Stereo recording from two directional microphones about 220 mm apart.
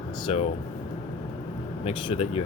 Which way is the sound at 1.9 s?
25° left (ahead or behind).